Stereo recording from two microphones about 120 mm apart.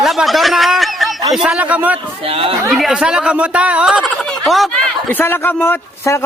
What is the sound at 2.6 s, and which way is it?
A woman's voice, centre (ahead or behind).